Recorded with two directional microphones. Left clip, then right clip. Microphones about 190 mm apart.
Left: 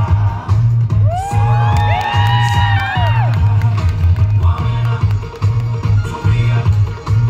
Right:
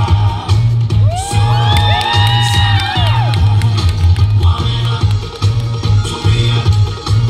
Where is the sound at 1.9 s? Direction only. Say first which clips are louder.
Right 2 dB; 30° left (ahead or behind).